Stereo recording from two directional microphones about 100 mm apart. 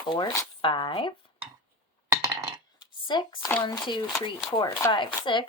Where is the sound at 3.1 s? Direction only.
50° left (ahead or behind).